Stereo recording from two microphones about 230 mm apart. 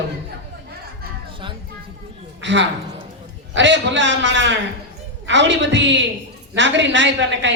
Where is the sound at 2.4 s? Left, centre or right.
Right.